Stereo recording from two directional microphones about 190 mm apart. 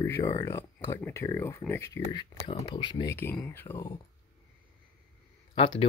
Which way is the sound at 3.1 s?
10° left (ahead or behind).